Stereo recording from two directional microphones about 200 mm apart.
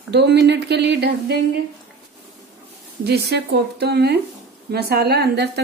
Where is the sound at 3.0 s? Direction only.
55° right (ahead or behind).